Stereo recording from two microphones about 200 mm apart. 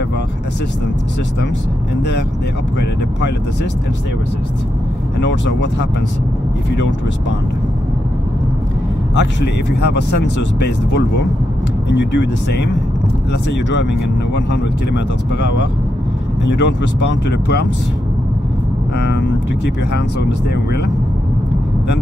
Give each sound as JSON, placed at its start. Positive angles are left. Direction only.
{"t": 5.2, "sound": "speech", "side_deg": 65}
{"t": 9.1, "sound": "speech", "side_deg": 60}
{"t": 15.3, "sound": "speech", "side_deg": 60}
{"t": 18.9, "sound": "speech", "side_deg": 55}